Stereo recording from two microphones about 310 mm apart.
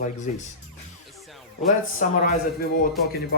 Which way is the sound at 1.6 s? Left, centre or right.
Left.